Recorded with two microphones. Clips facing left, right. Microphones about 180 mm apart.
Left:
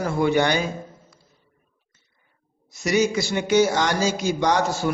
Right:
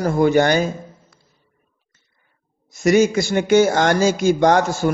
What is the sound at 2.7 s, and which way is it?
A man's voice, 50° right (ahead or behind).